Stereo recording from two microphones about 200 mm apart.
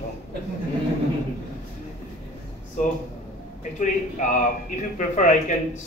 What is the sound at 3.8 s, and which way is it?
A man's voice, 40° left (ahead or behind).